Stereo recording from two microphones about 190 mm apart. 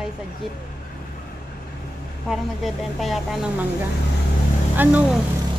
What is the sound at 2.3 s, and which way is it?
A woman's voice, centre (ahead or behind).